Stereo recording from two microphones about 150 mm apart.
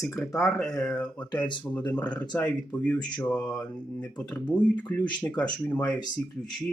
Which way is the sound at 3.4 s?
25° left (ahead or behind).